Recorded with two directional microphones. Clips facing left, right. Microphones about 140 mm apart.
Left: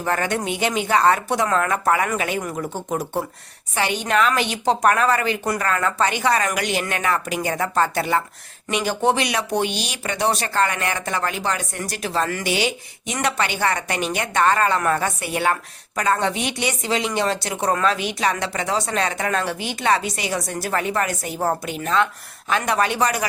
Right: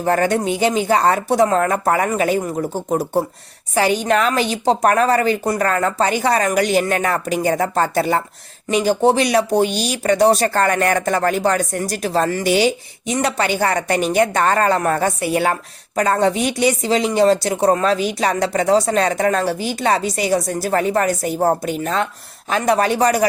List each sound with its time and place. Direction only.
0.0 s speech: 35° right (ahead or behind)